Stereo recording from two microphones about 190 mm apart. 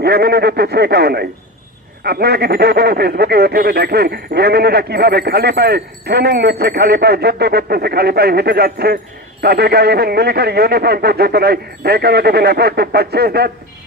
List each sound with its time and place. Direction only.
0.0 s speech: 60° right (ahead or behind)